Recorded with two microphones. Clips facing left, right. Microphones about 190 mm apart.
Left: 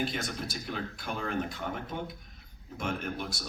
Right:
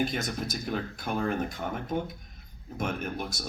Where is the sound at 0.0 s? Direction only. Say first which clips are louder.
Right 3 dB; 45° right (ahead or behind).